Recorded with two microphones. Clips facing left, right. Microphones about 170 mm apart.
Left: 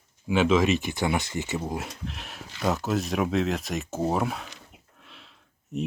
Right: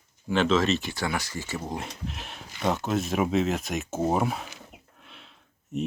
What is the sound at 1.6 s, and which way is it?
Speech, 5° left (ahead or behind).